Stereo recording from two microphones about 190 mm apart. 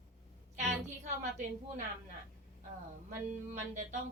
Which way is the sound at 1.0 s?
40° right (ahead or behind).